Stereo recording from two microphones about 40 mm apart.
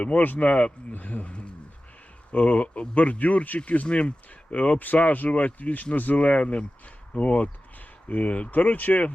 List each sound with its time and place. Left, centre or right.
0.3 s speech: left
0.9 s speech: left
2.3 s speech: left
3.6 s speech: left